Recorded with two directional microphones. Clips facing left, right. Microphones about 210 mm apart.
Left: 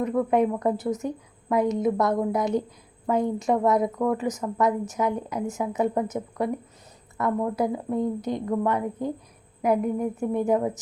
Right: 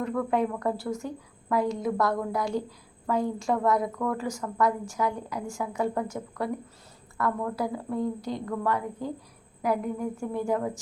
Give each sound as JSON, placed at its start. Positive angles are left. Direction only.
{"t": 0.0, "sound": "a woman's voice", "side_deg": 20}